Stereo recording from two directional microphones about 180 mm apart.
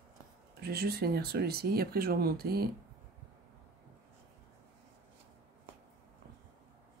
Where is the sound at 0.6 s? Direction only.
60° right (ahead or behind).